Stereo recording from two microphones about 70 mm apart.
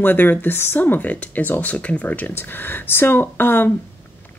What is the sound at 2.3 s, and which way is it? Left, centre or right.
Speech, left.